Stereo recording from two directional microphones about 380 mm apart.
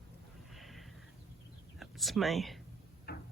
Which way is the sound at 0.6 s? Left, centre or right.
Centre.